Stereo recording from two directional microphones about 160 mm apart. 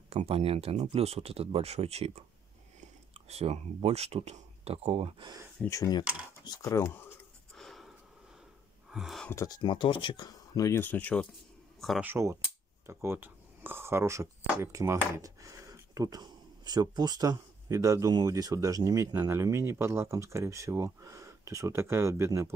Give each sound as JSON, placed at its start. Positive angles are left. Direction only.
{"t": 0.1, "sound": "speech", "side_deg": -40}
{"t": 5.7, "sound": "speech", "side_deg": 25}
{"t": 7.5, "sound": "a sound", "side_deg": 0}
{"t": 8.9, "sound": "a sound", "side_deg": 0}
{"t": 9.3, "sound": "speech", "side_deg": 20}
{"t": 9.6, "sound": "speech", "side_deg": 30}
{"t": 12.0, "sound": "speech", "side_deg": -15}